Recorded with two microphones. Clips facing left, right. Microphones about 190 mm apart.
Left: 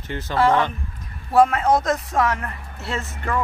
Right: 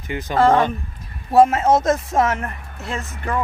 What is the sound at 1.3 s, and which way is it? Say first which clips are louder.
Speech: right 3 dB; 25° right (ahead or behind).